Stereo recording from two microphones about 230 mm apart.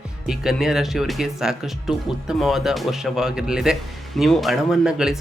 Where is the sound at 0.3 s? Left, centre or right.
Centre.